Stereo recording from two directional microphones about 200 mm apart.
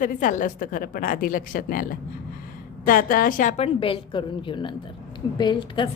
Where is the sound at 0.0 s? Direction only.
40° left (ahead or behind).